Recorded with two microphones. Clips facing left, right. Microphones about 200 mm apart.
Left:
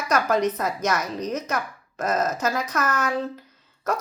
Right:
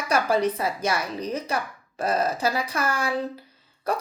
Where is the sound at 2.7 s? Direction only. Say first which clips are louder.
Left 1 dB; 10° right (ahead or behind).